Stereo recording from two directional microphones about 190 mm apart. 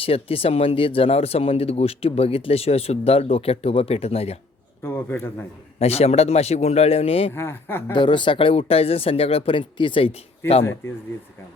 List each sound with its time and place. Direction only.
0.0 s speech: 30° left (ahead or behind)
4.8 s a man's voice: 10° left (ahead or behind)
5.8 s speech: 35° left (ahead or behind)
7.3 s a man's voice: 10° left (ahead or behind)
7.9 s speech: 25° left (ahead or behind)
10.4 s a man's voice: 15° left (ahead or behind)